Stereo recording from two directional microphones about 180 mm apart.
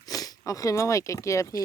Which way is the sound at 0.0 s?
20° left (ahead or behind).